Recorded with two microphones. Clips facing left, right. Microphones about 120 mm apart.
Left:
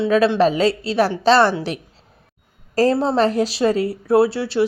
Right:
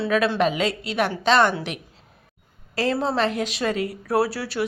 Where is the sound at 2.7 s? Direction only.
35° left (ahead or behind).